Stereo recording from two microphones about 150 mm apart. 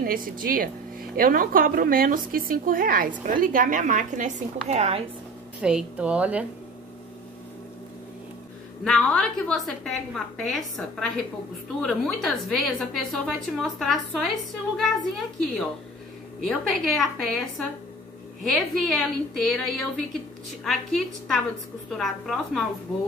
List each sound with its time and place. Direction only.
0.0 s speech: 70° right (ahead or behind); by 5.0 s 45° right (ahead or behind)
5.6 s a woman's voice: 5° right (ahead or behind)
8.8 s a woman's voice: 5° left (ahead or behind)
16.4 s a woman's voice: 5° left (ahead or behind)